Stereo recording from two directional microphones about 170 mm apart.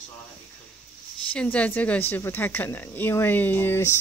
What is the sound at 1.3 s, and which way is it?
Speech, 5° left (ahead or behind).